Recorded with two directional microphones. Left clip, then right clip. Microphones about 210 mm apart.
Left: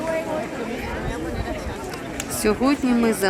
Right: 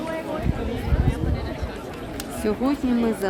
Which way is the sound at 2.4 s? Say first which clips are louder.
Left 4 dB; centre (ahead or behind).